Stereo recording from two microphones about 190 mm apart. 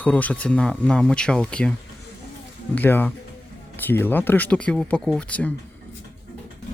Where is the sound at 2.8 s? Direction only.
10° left (ahead or behind).